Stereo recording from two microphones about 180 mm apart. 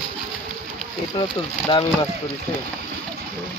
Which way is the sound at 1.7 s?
25° left (ahead or behind).